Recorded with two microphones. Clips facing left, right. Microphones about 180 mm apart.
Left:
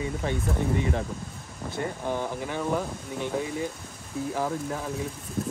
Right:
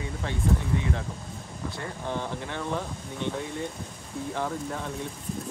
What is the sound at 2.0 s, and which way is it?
Speech, 10° left (ahead or behind).